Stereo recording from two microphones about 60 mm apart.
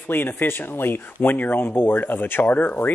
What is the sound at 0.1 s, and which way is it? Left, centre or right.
Speech, left.